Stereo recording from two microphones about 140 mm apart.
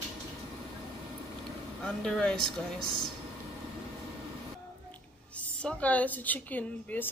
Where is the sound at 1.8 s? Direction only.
5° left (ahead or behind).